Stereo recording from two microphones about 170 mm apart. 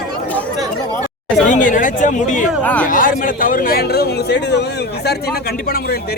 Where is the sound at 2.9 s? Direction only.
55° left (ahead or behind); by 4.6 s 85° left.